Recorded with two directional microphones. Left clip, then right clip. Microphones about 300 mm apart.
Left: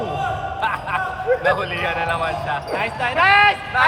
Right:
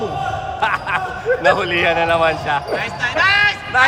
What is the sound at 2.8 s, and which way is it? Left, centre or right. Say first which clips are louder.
Speech: right 1 dB; centre.